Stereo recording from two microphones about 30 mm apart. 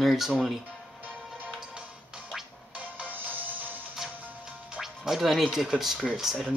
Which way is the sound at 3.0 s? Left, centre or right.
Right.